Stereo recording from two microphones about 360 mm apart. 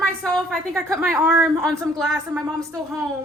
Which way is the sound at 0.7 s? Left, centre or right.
Centre.